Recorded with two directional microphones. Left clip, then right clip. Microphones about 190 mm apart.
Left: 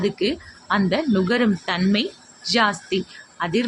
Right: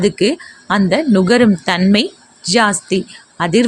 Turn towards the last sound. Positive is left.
turn(degrees=-45)  # may be behind; listen again after turning